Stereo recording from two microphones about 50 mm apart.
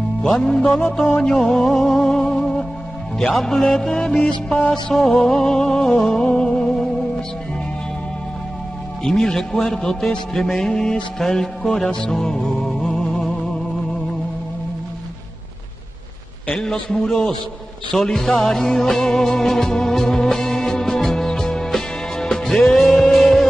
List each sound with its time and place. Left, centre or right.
0.6 s music: left
1.2 s a man's voice: centre
4.2 s music: left
9.0 s a man's voice: centre
12.1 s music: centre
16.5 s a man's voice: centre
17.9 s music: centre